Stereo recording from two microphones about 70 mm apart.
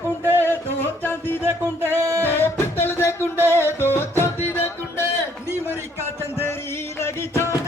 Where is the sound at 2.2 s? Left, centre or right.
Left.